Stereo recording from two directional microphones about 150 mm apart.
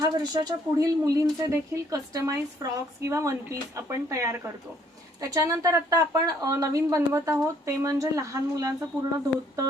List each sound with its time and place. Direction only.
0.0 s speech: 25° right (ahead or behind)